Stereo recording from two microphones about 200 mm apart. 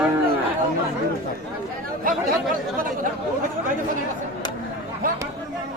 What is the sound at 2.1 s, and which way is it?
Chatter, 45° right (ahead or behind).